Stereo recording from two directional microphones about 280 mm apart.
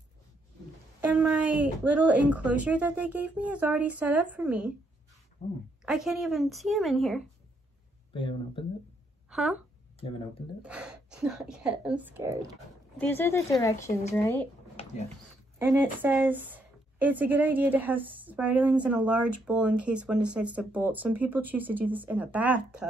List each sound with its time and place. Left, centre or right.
1.0 s speech: centre
5.9 s speech: centre
8.1 s a woman's voice: centre
9.3 s speech: centre
10.6 s speech: centre
13.0 s a woman's voice: centre
15.6 s speech: centre